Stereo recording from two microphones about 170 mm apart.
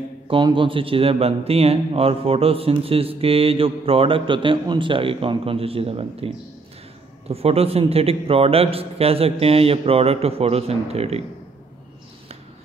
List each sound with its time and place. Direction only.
0.3 s a man's voice: 30° right (ahead or behind)